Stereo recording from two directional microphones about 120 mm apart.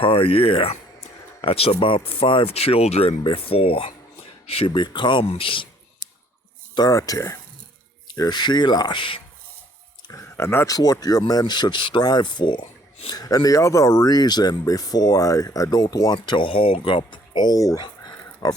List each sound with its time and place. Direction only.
0.0 s speech: 50° left (ahead or behind)
5.2 s speech: 55° left (ahead or behind)
6.7 s speech: 30° left (ahead or behind)
10.1 s speech: 25° left (ahead or behind)
10.8 s speech: 30° left (ahead or behind)
16.1 s speech: 40° left (ahead or behind)
17.8 s a sound: 35° left (ahead or behind)